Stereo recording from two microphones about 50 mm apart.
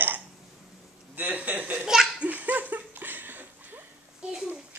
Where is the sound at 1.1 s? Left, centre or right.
Right.